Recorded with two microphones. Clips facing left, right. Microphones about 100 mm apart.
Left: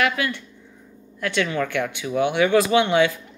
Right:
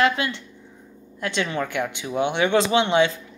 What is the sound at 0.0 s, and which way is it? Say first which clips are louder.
Speech: right 1 dB; 25° right (ahead or behind).